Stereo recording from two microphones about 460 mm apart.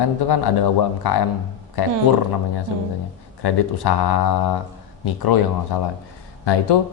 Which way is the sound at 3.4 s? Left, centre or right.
Left.